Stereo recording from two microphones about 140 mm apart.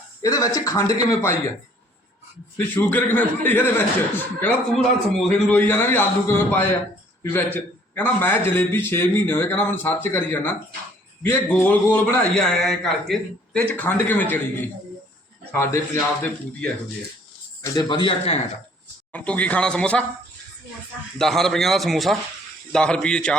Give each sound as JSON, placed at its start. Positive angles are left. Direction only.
{"t": 0.2, "sound": "a man's voice", "side_deg": 25}
{"t": 2.6, "sound": "a man's voice", "side_deg": 10}
{"t": 4.7, "sound": "a man's voice", "side_deg": 5}
{"t": 17.6, "sound": "a man's voice", "side_deg": 30}
{"t": 19.1, "sound": "a man's voice", "side_deg": 10}
{"t": 21.2, "sound": "a man's voice", "side_deg": 5}